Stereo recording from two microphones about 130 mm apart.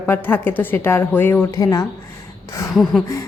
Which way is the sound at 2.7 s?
Centre (ahead or behind).